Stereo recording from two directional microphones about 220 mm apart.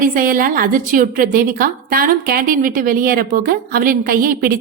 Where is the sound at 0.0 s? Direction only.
40° right (ahead or behind).